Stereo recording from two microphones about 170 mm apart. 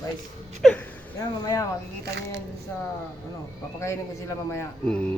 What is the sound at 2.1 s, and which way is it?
Speech, 85° right.